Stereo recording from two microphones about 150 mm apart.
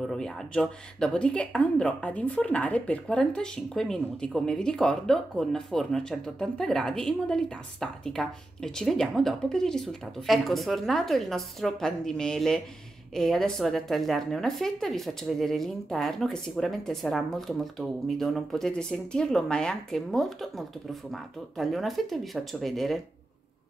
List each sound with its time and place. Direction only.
0.0 s a woman's voice: 5° left (ahead or behind)